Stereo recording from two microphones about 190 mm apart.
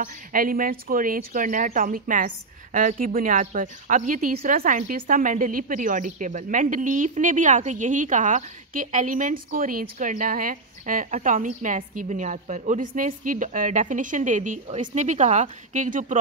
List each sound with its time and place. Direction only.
0.0 s speech: 50° right (ahead or behind)